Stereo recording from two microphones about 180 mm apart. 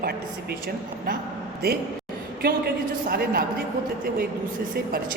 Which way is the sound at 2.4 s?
60° right (ahead or behind).